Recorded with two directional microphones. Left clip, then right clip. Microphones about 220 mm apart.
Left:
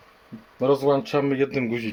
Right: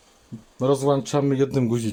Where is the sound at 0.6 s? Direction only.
15° right (ahead or behind).